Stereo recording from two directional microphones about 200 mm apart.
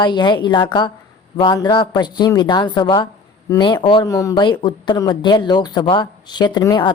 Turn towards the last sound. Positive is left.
turn(degrees=20)  # may be behind; listen again after turning